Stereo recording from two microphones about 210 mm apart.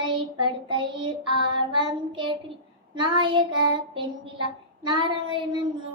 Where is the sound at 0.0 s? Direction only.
20° right (ahead or behind).